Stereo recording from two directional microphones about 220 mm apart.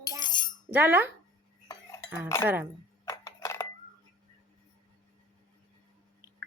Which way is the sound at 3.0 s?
15° left (ahead or behind).